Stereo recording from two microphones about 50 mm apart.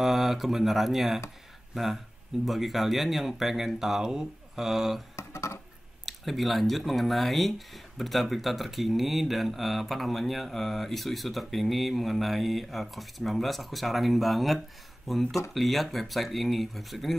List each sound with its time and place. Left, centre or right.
0.0 s speech: centre
5.1 s a sound: left
6.0 s speech: centre